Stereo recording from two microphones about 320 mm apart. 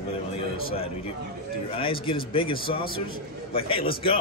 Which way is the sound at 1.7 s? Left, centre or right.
Centre.